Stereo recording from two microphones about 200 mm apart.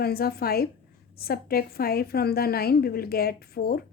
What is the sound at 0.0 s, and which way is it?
A woman's voice, 50° left (ahead or behind).